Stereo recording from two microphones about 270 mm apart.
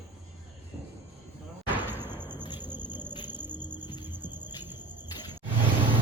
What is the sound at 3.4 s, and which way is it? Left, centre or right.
Music, centre.